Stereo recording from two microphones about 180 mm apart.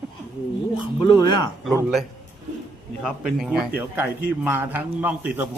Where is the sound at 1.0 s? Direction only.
25° left (ahead or behind).